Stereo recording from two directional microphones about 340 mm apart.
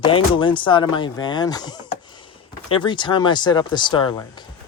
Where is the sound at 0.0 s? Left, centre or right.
Centre.